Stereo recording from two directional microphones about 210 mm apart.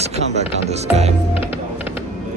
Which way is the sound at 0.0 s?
30° right (ahead or behind).